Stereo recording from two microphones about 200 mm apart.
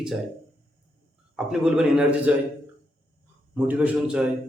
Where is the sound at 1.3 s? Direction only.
5° right (ahead or behind).